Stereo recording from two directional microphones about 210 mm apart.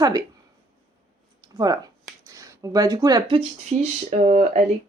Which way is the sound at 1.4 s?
20° right (ahead or behind).